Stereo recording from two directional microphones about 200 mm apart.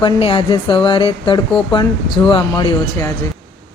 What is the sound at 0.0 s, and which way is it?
Speech, 25° left (ahead or behind).